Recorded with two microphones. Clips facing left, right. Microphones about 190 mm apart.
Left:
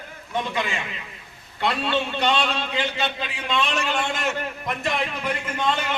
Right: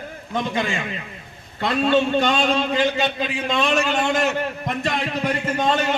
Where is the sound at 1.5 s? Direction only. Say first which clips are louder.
Right 6 dB; 45° right (ahead or behind).